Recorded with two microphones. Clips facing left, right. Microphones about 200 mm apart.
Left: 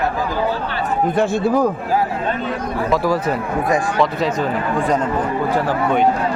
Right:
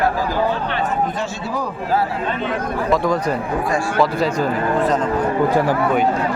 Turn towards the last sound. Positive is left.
turn(degrees=-5)  # may be behind; listen again after turning